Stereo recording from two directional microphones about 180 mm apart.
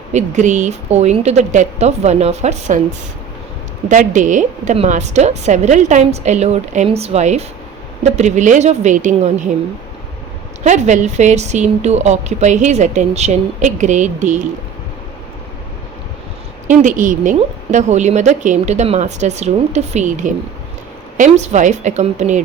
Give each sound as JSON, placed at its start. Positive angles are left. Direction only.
{"t": 0.1, "sound": "a woman's voice", "side_deg": -40}
{"t": 3.8, "sound": "a woman's voice", "side_deg": -45}
{"t": 10.6, "sound": "a woman's voice", "side_deg": -40}
{"t": 16.6, "sound": "a woman's voice", "side_deg": -45}